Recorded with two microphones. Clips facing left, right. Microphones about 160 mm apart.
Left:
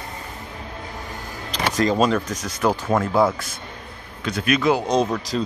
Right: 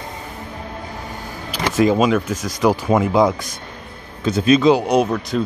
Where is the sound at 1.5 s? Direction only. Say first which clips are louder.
Right 4 dB; 5° right (ahead or behind).